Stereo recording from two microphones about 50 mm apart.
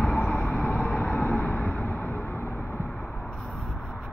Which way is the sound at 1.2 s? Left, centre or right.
Left.